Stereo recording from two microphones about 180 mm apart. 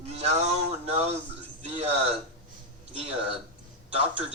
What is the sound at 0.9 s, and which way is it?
A man's voice, 35° right (ahead or behind).